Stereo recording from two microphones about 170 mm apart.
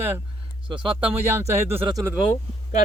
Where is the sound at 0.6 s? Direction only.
30° right (ahead or behind).